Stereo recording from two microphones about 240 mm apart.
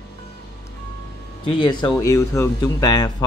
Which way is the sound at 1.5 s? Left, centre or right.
Centre.